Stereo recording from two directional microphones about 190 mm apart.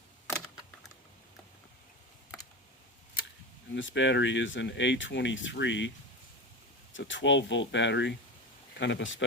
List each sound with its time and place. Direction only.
3.8 s speech: 70° left (ahead or behind)
6.9 s speech: 75° left (ahead or behind)